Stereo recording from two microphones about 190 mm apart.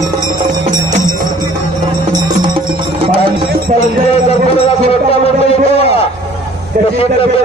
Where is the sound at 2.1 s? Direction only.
25° right (ahead or behind).